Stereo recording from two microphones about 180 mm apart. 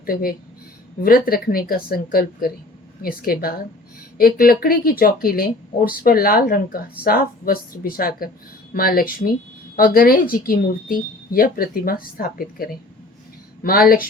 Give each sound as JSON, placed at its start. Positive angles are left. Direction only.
{"t": 0.0, "sound": "speech", "side_deg": 55}